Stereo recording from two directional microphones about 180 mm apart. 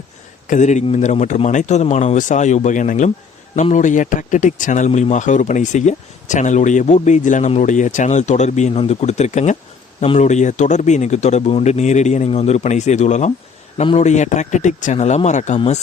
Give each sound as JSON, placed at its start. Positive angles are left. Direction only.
{"t": 0.4, "sound": "speech", "side_deg": 45}